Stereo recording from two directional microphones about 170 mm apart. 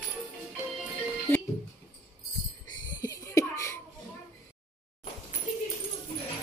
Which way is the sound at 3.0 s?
20° left (ahead or behind).